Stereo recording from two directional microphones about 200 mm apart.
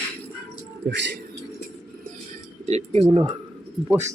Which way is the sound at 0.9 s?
60° right (ahead or behind).